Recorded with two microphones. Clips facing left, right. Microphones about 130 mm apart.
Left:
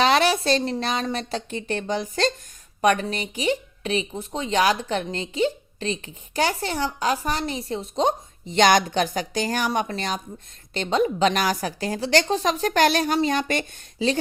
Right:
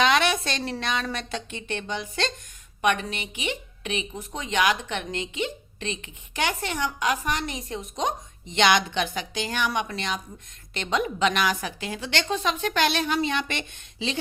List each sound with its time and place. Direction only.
0.0 s a woman's voice: 35° left (ahead or behind)